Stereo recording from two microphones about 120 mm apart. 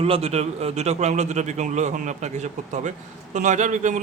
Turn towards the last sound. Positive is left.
turn(degrees=-90)